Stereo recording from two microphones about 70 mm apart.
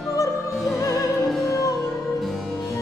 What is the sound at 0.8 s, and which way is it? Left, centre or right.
Opera, left.